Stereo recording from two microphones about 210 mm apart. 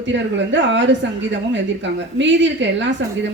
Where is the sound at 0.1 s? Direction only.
60° right (ahead or behind).